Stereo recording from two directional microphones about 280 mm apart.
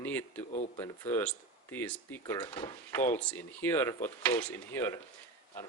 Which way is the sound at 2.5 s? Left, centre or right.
Centre.